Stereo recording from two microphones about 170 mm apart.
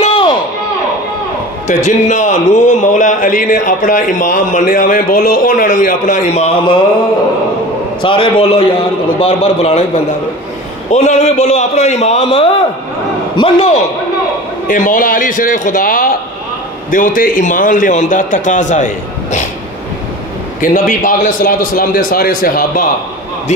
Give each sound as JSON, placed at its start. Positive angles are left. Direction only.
{"t": 0.0, "sound": "a sound", "side_deg": 35}
{"t": 1.7, "sound": "a man's voice", "side_deg": 45}
{"t": 8.0, "sound": "a man's voice", "side_deg": 30}
{"t": 10.9, "sound": "a man's voice", "side_deg": 40}
{"t": 14.7, "sound": "a man's voice", "side_deg": 50}
{"t": 20.6, "sound": "a man's voice", "side_deg": 50}